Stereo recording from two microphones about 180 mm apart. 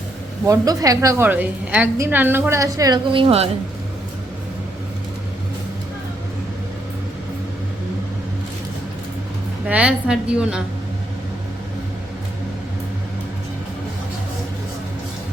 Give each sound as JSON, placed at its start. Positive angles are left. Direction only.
{"t": 0.4, "sound": "a woman's voice", "side_deg": -20}
{"t": 9.6, "sound": "a woman's voice", "side_deg": -5}